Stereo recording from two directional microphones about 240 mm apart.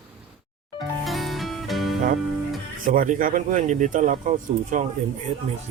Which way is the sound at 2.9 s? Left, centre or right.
Right.